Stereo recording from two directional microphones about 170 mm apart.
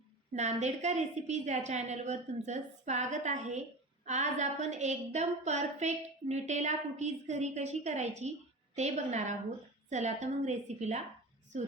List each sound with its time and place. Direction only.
0.3 s a woman's voice: 40° right (ahead or behind)